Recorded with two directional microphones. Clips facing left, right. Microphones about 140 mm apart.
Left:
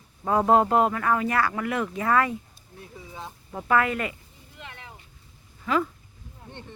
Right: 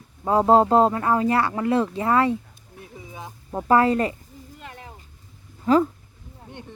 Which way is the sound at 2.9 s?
15° right (ahead or behind).